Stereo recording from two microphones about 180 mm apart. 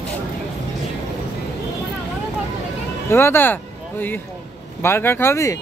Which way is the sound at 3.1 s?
15° left (ahead or behind).